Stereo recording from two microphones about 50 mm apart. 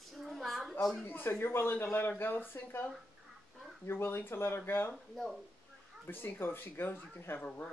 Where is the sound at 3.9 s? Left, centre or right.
Left.